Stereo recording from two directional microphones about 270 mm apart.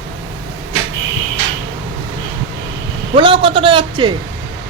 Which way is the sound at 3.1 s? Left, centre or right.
Centre.